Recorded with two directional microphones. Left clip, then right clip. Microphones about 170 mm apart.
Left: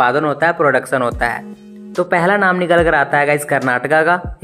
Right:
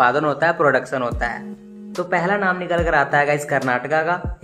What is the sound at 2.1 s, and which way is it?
Speech, 35° left (ahead or behind).